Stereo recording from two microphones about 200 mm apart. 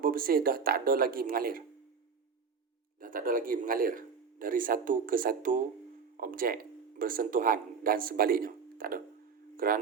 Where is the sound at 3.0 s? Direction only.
45° right (ahead or behind).